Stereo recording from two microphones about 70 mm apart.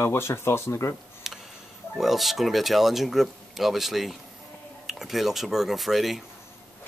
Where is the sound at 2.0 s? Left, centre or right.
Centre.